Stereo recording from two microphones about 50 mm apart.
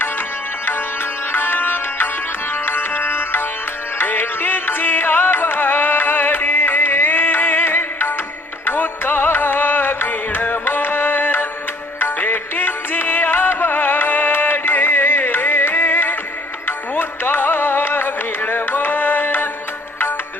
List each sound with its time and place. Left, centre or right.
1.3 s music: left